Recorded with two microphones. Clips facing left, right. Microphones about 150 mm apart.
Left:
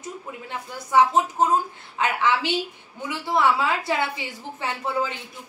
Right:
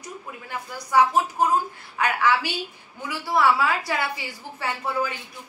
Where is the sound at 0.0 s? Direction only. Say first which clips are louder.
Left 3 dB; 25° left (ahead or behind).